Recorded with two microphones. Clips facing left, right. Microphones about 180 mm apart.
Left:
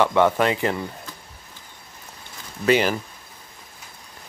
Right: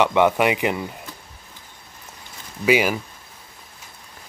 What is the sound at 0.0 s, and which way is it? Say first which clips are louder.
Speech: right 1 dB; 15° right (ahead or behind).